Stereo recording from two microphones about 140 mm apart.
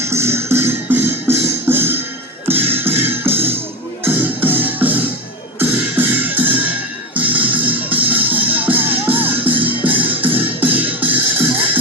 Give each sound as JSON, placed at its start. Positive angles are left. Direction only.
{"t": 0.0, "sound": "music", "side_deg": -20}